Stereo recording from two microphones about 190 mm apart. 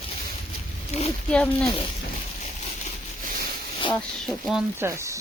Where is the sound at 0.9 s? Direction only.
35° left (ahead or behind).